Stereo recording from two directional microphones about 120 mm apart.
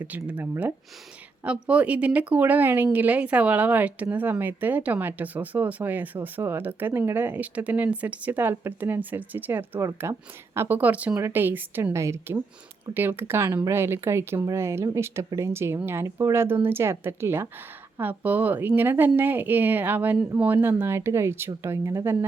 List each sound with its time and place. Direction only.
0.0 s speech: 15° right (ahead or behind)